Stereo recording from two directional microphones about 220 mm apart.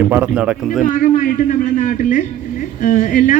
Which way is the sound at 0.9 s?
35° left (ahead or behind).